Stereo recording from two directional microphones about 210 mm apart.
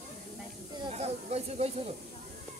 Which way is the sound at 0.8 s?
30° right (ahead or behind).